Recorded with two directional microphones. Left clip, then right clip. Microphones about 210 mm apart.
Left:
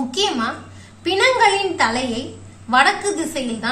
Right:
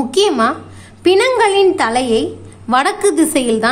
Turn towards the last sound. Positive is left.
turn(degrees=-55)  # may be behind; listen again after turning